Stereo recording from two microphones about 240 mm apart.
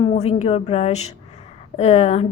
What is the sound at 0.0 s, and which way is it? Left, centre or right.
Speech, left.